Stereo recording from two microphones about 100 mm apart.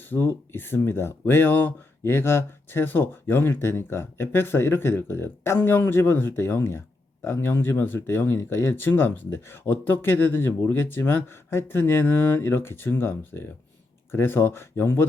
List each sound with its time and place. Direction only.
0.1 s speech: 20° left (ahead or behind)